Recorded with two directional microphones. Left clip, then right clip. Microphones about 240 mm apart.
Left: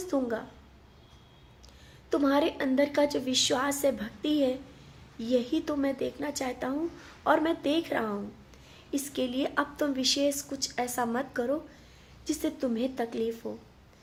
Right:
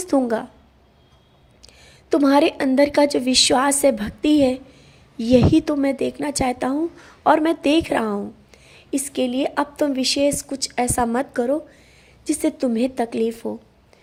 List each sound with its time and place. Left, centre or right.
0.0 s a woman's voice: right
1.6 s a woman's voice: right